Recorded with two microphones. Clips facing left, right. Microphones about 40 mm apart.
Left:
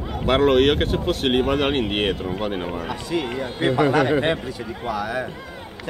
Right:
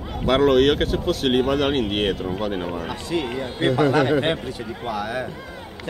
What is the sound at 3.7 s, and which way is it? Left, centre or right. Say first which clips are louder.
Speech: even; left.